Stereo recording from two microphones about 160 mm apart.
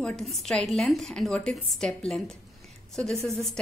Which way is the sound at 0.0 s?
Centre (ahead or behind).